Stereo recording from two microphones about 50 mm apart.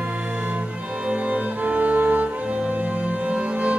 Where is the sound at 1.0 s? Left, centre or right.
Right.